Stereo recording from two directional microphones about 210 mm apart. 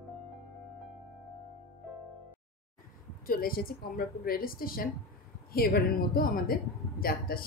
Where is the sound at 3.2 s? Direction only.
45° left (ahead or behind).